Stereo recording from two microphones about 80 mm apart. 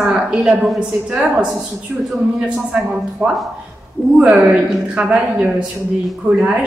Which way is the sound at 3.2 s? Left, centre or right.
Right.